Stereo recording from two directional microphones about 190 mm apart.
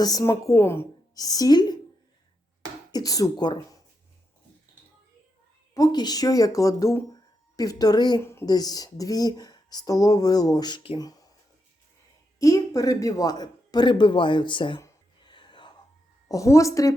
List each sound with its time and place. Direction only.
0.0 s speech: 20° left (ahead or behind)
2.9 s speech: 20° left (ahead or behind)
5.7 s speech: 20° left (ahead or behind)
12.4 s speech: 20° left (ahead or behind)
15.3 s whispering: 25° left (ahead or behind)
16.3 s a woman's voice: 15° left (ahead or behind)